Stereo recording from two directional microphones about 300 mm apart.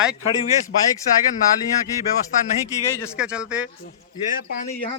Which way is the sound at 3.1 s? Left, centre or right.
Centre.